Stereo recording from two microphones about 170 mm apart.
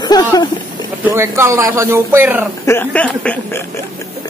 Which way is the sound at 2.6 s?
10° left (ahead or behind).